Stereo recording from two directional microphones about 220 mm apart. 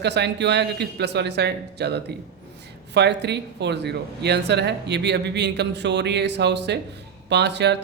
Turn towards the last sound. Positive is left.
turn(degrees=-50)  # may be behind; listen again after turning